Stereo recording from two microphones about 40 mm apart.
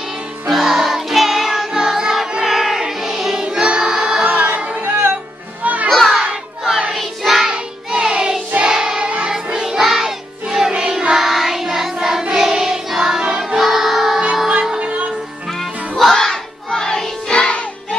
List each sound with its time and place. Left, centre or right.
0.5 s music: centre
3.4 s choir: right
4.2 s a sound: right
5.6 s children playing: right
5.9 s music: centre
7.4 s music: centre
11.1 s music: centre
14.5 s music: right
16.1 s music: centre